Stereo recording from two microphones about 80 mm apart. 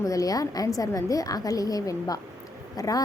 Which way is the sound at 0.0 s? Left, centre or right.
Left.